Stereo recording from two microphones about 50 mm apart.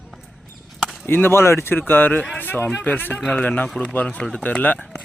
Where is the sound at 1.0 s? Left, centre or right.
Left.